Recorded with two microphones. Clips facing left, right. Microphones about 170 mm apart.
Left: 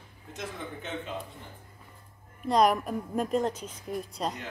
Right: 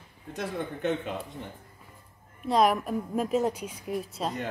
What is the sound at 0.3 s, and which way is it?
Speech, 65° right (ahead or behind).